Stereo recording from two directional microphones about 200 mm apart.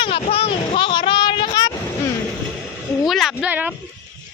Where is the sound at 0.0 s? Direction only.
25° left (ahead or behind).